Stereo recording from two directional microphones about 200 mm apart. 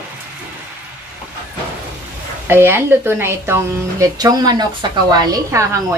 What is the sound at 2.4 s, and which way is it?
Speech, 10° right (ahead or behind).